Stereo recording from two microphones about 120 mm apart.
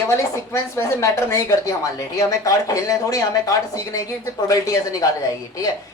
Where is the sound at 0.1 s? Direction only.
25° left (ahead or behind).